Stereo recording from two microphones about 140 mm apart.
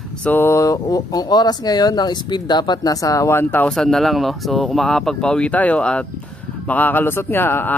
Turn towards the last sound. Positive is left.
turn(degrees=15)  # may be behind; listen again after turning